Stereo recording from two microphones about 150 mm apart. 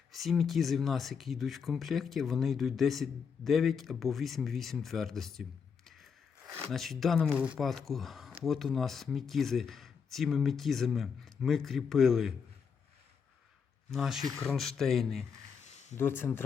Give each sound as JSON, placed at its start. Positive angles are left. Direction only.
{"t": 0.1, "sound": "speech", "side_deg": 0}
{"t": 13.9, "sound": "speech", "side_deg": 0}
{"t": 15.6, "sound": "a sound", "side_deg": 50}
{"t": 16.0, "sound": "speech", "side_deg": 15}